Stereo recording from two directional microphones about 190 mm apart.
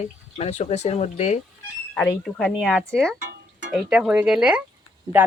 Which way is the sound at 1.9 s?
5° left (ahead or behind).